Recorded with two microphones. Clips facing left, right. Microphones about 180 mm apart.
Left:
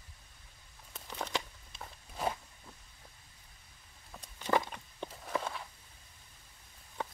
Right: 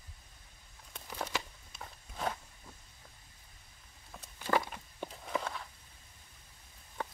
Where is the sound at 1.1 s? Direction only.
5° right (ahead or behind).